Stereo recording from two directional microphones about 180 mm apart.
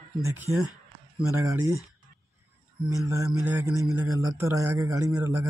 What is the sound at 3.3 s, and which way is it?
Speech, 10° right (ahead or behind).